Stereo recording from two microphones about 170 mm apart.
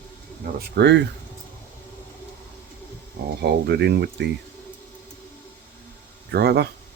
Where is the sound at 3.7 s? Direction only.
80° right.